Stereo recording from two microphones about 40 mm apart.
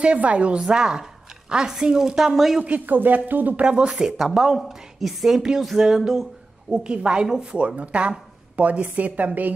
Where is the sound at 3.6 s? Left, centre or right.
Right.